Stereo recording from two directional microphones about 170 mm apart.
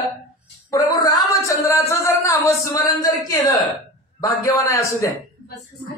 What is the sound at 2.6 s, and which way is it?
A man's voice, 20° left (ahead or behind).